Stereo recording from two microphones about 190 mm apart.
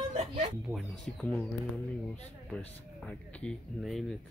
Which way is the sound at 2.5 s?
5° left (ahead or behind).